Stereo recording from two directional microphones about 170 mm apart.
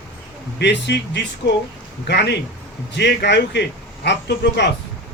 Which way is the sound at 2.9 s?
90° left.